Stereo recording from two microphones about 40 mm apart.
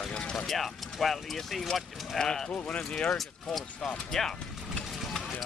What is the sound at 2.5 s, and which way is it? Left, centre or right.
Speech, left.